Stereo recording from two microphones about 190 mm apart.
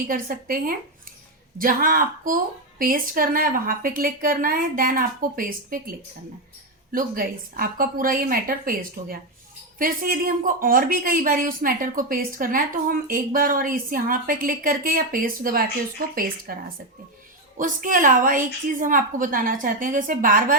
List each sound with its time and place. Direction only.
0.1 s a woman's voice: 50° right (ahead or behind)
6.9 s a woman's voice: 50° right (ahead or behind)